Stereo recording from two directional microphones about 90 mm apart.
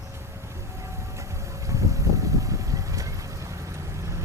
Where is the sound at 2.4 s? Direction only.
35° right (ahead or behind).